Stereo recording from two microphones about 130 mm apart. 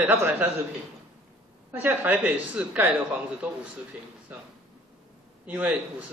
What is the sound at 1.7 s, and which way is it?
A man's voice, 15° right (ahead or behind).